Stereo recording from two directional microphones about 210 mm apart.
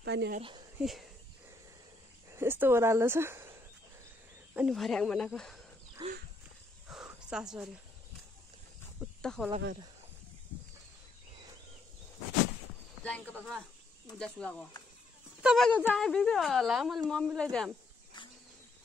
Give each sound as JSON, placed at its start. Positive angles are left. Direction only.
{"t": 0.0, "sound": "speech", "side_deg": -55}
{"t": 0.4, "sound": "speech", "side_deg": -25}
{"t": 2.3, "sound": "speech", "side_deg": -10}
{"t": 4.6, "sound": "speech", "side_deg": 0}
{"t": 6.0, "sound": "dog", "side_deg": -20}
{"t": 6.9, "sound": "a sound", "side_deg": -5}
{"t": 9.2, "sound": "speech", "side_deg": 5}
{"t": 13.0, "sound": "speech", "side_deg": 5}